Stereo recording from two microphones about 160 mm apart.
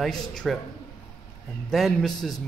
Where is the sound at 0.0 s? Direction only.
5° left (ahead or behind).